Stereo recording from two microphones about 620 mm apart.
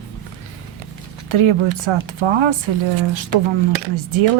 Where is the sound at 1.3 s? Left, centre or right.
Right.